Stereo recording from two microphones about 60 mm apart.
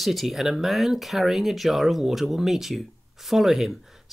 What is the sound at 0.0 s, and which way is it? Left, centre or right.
Speech, centre.